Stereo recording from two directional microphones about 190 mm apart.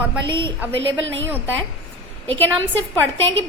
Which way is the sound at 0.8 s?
80° right.